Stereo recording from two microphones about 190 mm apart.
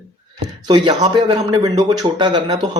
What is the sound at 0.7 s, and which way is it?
Speech, 25° right (ahead or behind).